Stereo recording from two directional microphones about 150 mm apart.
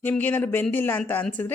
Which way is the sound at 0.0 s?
10° left (ahead or behind).